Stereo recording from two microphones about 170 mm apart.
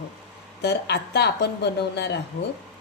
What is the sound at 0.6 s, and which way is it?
Speech, 80° left.